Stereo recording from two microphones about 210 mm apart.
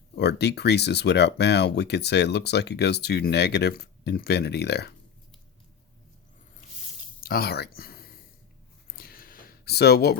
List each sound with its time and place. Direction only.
0.2 s speech: 55° left (ahead or behind)
7.2 s speech: 45° left (ahead or behind)
9.0 s a sound: 45° left (ahead or behind)